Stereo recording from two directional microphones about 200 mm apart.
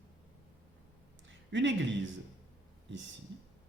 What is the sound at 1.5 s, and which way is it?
Speech, 65° right (ahead or behind).